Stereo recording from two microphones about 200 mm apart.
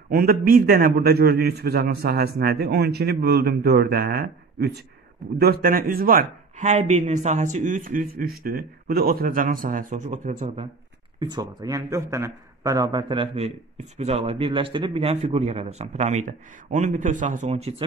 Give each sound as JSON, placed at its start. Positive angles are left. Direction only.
{"t": 0.1, "sound": "speech", "side_deg": -45}
{"t": 11.1, "sound": "a man's voice", "side_deg": -20}